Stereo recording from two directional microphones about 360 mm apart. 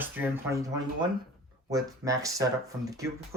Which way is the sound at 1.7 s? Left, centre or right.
Centre.